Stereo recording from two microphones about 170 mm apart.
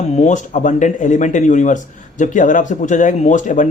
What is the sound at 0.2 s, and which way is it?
Speech, 45° left (ahead or behind).